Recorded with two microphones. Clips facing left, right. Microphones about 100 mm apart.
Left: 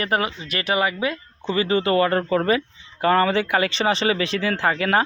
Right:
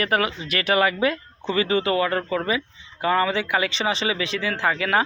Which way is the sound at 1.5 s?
35° left (ahead or behind).